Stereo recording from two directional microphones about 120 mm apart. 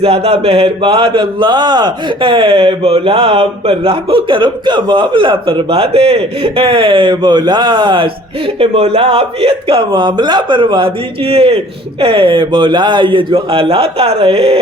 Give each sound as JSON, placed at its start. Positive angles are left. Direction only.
{"t": 0.0, "sound": "speech", "side_deg": -50}